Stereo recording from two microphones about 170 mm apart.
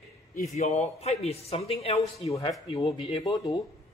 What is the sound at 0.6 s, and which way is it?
A man's voice, 40° left (ahead or behind).